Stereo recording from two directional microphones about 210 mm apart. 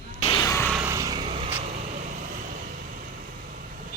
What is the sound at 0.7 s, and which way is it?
Vehicle, 10° right (ahead or behind).